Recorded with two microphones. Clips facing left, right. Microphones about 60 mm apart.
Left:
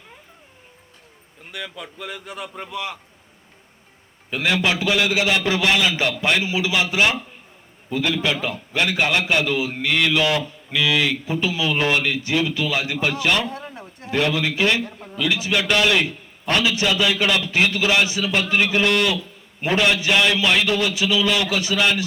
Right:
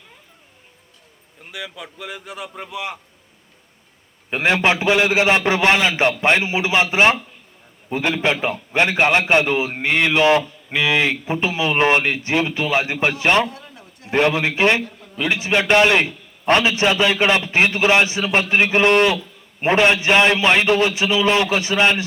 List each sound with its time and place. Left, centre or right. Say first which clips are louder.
1.5 s a man's voice: right 1 dB; centre
4.3 s a man's voice: right 3 dB; right
13.5 s a sound: left 6 dB; left
14.1 s a man's voice: right 4 dB; right
14.8 s a sound: left 3 dB; left
15.2 s a man's voice: right 2 dB; right